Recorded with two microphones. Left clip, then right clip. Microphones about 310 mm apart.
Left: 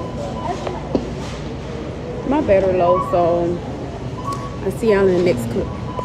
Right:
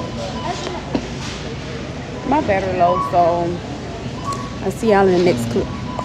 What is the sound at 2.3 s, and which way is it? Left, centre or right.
Speech, centre.